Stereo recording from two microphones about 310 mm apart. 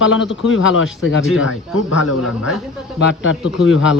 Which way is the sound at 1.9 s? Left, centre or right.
Left.